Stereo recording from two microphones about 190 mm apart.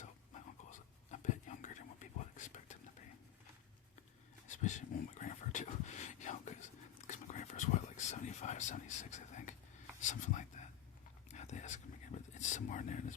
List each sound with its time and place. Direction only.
0.7 s whispering: 40° left (ahead or behind)
4.4 s a sound: 40° left (ahead or behind)
7.1 s whispering: 40° left (ahead or behind)
10.0 s speech: 40° left (ahead or behind)
11.3 s whispering: 35° left (ahead or behind)
12.3 s speech: 40° left (ahead or behind)